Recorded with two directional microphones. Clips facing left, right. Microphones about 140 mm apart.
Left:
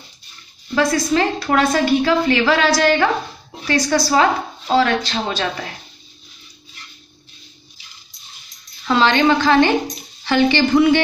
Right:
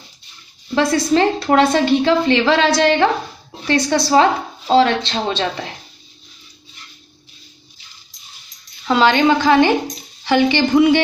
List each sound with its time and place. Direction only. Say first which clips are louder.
0.7 s a woman's voice: right 2 dB; 30° right (ahead or behind)
8.8 s a woman's voice: right 1 dB; 15° right (ahead or behind)